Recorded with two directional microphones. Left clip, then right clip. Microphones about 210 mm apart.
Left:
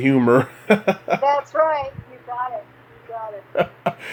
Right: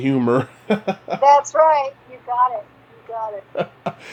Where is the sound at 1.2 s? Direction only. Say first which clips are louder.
Right 7 dB; 40° right (ahead or behind).